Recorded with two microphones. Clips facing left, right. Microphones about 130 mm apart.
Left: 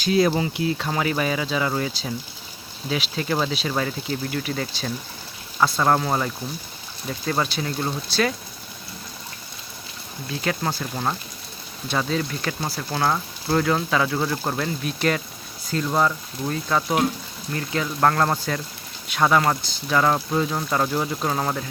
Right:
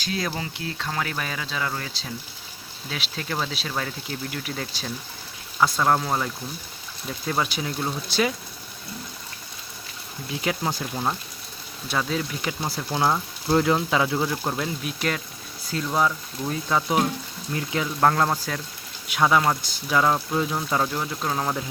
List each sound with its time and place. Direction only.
0.0 s speech: 20° left (ahead or behind); by 7.9 s centre (ahead or behind)
10.2 s speech: 10° right (ahead or behind)
10.9 s speech: centre (ahead or behind)
20.8 s speech: 10° left (ahead or behind)